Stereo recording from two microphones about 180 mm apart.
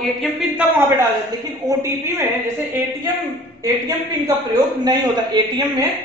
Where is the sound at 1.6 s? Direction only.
15° right (ahead or behind).